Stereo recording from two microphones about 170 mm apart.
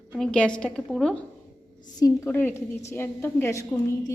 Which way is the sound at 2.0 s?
20° left (ahead or behind).